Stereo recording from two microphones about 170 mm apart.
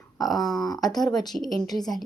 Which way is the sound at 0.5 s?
20° left (ahead or behind).